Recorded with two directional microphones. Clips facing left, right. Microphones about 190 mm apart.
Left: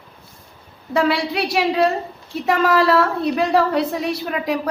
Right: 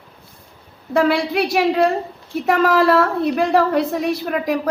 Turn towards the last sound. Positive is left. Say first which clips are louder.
# right 2 dB
turn(degrees=-50)  # may be behind; listen again after turning